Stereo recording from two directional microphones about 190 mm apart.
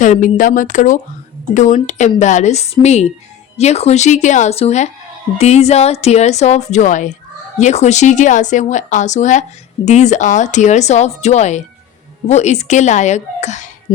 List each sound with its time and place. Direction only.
0.0 s a woman's voice: 40° left (ahead or behind)